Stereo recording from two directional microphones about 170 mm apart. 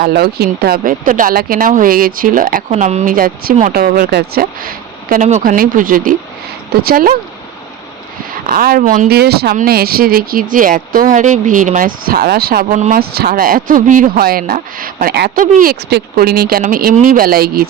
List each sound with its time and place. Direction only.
0.0 s speech: 65° right (ahead or behind)
8.4 s speech: 60° right (ahead or behind)
9.0 s speech: 65° right (ahead or behind)
12.7 s speech: 45° right (ahead or behind)
13.0 s speech: 65° right (ahead or behind)